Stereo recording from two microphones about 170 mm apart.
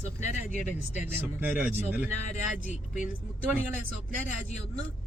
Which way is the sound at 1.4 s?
10° right (ahead or behind).